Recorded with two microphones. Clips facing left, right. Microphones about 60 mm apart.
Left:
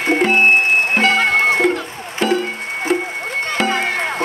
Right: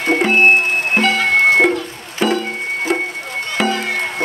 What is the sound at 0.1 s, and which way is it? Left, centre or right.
Music, centre.